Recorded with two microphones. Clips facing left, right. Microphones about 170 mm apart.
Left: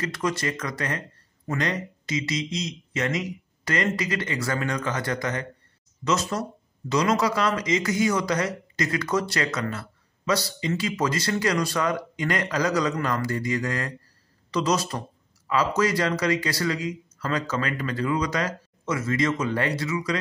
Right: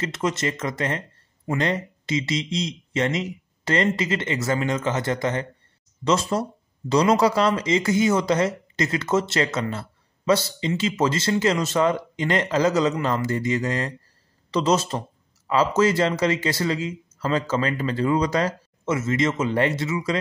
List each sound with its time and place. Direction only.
0.0 s speech: 25° right (ahead or behind)